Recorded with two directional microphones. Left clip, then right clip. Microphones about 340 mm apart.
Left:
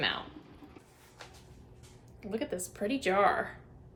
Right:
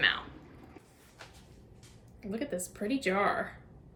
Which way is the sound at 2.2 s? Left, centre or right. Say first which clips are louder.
Left 1 dB; centre.